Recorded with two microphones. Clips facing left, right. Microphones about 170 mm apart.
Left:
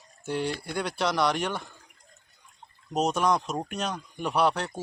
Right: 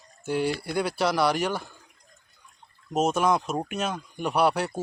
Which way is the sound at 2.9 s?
5° right (ahead or behind).